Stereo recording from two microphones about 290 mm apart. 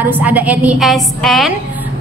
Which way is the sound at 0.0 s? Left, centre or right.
Centre.